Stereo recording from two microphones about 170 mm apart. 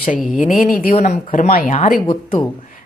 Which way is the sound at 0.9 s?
40° left (ahead or behind).